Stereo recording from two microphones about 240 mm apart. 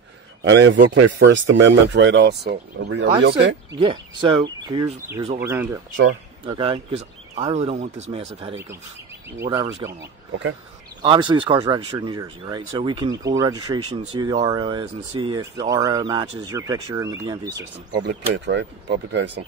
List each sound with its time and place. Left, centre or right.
0.4 s speech: right
3.8 s speech: centre
6.4 s speech: right
11.0 s speech: centre
18.3 s speech: right